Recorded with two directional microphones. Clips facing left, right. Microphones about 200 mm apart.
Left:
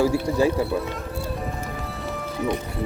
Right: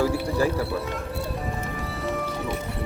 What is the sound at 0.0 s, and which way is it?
Speech, 15° left (ahead or behind).